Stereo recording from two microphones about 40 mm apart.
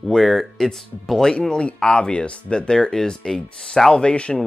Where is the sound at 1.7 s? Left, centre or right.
Left.